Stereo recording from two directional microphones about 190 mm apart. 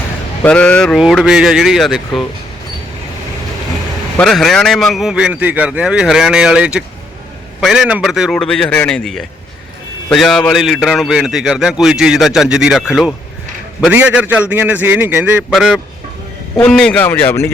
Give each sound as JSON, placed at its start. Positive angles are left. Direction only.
{"t": 0.4, "sound": "a man's voice", "side_deg": 5}
{"t": 4.2, "sound": "a man's voice", "side_deg": 0}